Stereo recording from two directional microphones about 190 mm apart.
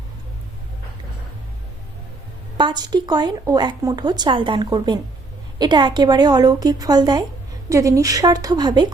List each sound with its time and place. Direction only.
2.6 s speech: 25° right (ahead or behind)